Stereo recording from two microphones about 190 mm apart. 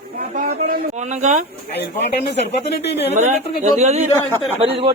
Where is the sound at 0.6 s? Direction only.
40° right (ahead or behind).